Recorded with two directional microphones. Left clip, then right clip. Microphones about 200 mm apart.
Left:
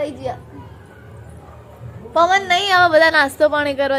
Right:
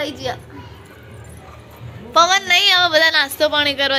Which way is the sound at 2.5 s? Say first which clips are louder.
Even; 35° left (ahead or behind).